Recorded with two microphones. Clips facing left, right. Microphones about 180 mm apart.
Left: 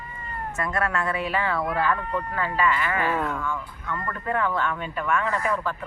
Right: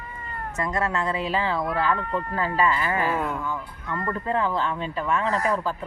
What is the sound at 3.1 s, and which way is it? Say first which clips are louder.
Speech: even; 10° right (ahead or behind).